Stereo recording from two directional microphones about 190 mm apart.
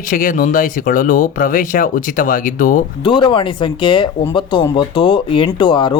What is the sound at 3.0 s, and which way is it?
Speech, 25° left (ahead or behind).